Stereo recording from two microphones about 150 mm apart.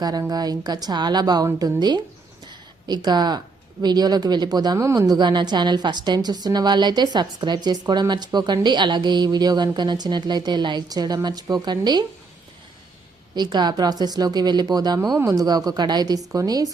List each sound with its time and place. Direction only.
0.0 s speech: 25° right (ahead or behind)
13.3 s speech: 30° right (ahead or behind)